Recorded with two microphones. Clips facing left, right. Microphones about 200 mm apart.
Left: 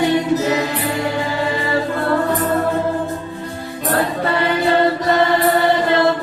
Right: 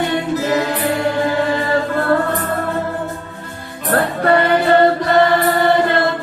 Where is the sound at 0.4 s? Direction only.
50° right (ahead or behind).